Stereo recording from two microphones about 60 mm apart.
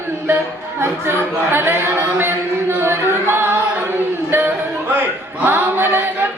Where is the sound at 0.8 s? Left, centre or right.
Right.